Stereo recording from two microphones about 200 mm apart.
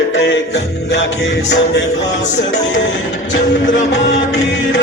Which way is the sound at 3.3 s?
65° left (ahead or behind).